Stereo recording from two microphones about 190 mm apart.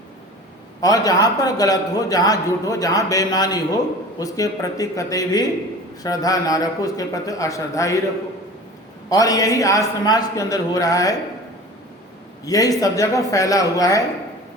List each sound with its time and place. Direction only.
0.8 s a man's voice: 20° left (ahead or behind)
9.0 s a man's voice: 20° left (ahead or behind)
12.5 s a man's voice: 20° left (ahead or behind)